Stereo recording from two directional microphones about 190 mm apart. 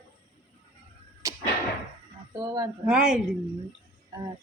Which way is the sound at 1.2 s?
15° right (ahead or behind).